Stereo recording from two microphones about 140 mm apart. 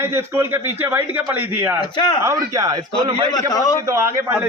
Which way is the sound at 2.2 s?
20° right (ahead or behind).